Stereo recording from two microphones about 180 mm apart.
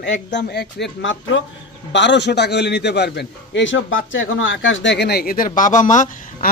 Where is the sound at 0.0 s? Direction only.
80° left.